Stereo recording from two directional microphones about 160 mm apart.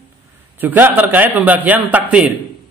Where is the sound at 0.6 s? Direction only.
10° right (ahead or behind).